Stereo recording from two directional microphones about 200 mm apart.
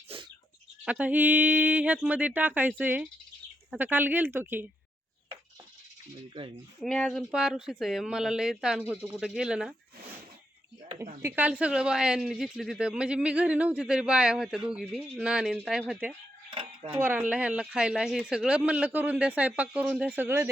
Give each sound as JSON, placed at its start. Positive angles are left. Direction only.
{"t": 0.1, "sound": "goat", "side_deg": -30}
{"t": 0.9, "sound": "speech", "side_deg": -5}
{"t": 6.7, "sound": "a woman's voice", "side_deg": 0}
{"t": 11.2, "sound": "a woman's voice", "side_deg": -10}
{"t": 16.5, "sound": "a sound", "side_deg": -25}
{"t": 17.0, "sound": "speech", "side_deg": -10}